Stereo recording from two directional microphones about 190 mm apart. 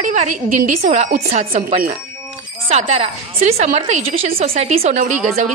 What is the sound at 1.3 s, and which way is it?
A woman's voice, 40° right (ahead or behind).